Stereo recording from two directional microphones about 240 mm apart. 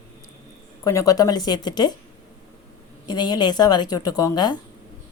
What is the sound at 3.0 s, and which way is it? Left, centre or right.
A woman's voice, centre.